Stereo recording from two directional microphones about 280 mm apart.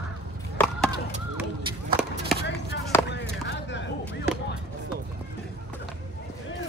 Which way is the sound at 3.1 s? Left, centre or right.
Left.